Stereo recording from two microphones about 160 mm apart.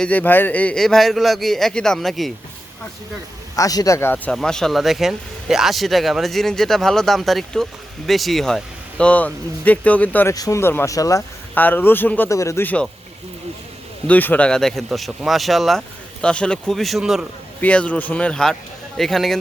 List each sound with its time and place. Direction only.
0.0 s speech: 10° left (ahead or behind)
3.5 s speech: 20° left (ahead or behind)
4.3 s speech: 5° left (ahead or behind)
10.3 s speech: 20° left (ahead or behind)
14.1 s speech: 10° left (ahead or behind)
17.6 s speech: 10° left (ahead or behind)